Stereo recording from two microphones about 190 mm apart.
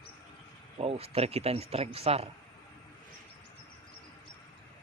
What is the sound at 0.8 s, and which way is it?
Speech, 30° right (ahead or behind).